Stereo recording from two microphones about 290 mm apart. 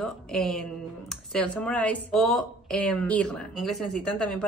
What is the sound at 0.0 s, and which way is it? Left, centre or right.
Speech, centre.